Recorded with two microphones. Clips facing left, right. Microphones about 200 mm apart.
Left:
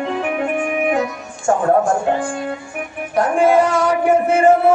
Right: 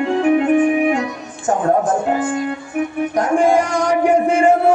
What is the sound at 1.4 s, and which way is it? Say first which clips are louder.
Speech: left 1 dB; 20° right (ahead or behind).